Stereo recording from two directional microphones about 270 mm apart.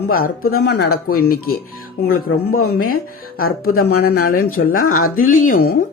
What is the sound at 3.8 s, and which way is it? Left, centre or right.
Speech, left.